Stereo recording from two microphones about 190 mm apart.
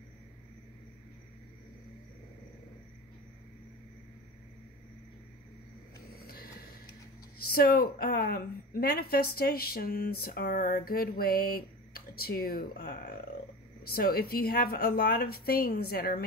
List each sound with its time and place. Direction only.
6.1 s vehicle: 55° left (ahead or behind)
7.4 s a woman's voice: 50° left (ahead or behind)